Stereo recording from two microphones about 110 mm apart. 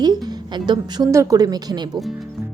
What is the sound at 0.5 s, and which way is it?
Speech, 40° right (ahead or behind).